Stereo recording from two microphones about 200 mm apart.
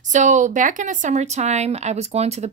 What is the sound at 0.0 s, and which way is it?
Speech, 35° right (ahead or behind).